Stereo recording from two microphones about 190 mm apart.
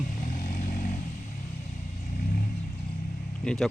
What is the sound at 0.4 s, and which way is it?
Vehicle, 45° left (ahead or behind).